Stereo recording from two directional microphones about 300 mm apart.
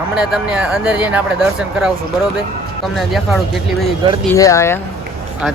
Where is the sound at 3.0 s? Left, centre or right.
Centre.